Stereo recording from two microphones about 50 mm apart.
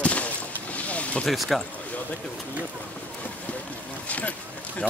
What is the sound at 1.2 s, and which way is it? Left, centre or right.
Speech, centre.